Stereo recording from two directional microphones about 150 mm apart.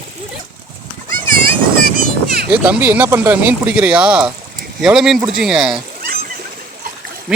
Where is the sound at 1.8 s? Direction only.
85° right.